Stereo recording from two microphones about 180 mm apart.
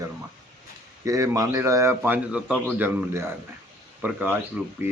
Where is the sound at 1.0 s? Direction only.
15° right (ahead or behind).